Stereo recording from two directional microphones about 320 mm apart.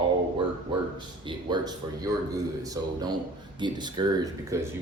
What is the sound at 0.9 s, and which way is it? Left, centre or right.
A man's voice, centre.